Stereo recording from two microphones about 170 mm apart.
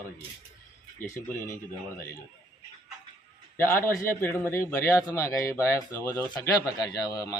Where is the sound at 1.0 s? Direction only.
15° left (ahead or behind).